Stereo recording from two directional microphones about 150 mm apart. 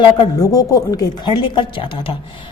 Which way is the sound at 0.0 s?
25° left (ahead or behind).